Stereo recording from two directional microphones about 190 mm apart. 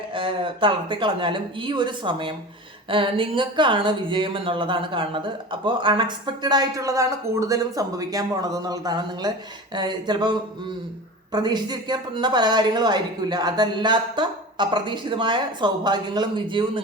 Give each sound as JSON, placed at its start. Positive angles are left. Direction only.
{"t": 0.1, "sound": "speech", "side_deg": -25}